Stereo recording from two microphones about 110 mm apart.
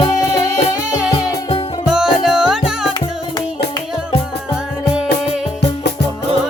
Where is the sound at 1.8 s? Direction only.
5° right (ahead or behind).